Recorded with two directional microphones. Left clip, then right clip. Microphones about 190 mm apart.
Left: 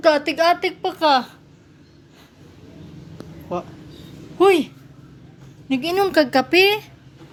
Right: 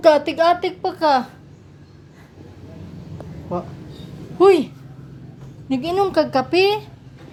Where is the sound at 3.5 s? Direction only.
5° left (ahead or behind).